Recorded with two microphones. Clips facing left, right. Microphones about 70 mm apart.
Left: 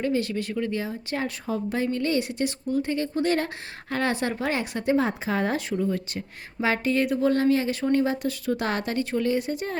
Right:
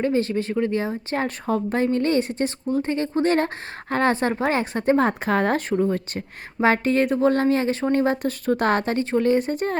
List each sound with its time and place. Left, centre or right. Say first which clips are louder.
0.0 s speech: right 4 dB; right